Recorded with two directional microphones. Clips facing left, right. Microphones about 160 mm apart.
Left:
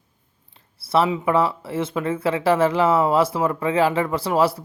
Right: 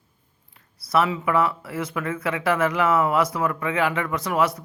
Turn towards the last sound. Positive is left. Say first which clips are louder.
# left 3 dB
turn(degrees=30)  # may be behind; listen again after turning